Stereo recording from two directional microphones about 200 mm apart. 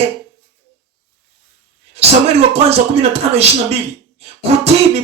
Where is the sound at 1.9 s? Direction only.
30° right (ahead or behind).